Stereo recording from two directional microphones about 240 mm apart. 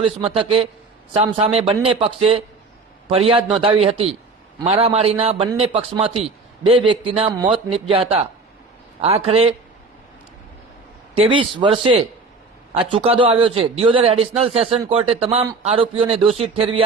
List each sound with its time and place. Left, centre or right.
0.0 s a man's voice: right
11.1 s a man's voice: right